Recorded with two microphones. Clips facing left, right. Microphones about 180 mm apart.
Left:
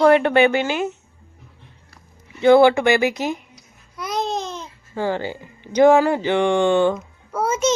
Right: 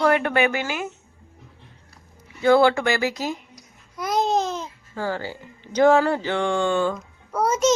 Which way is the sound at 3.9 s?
50° right (ahead or behind).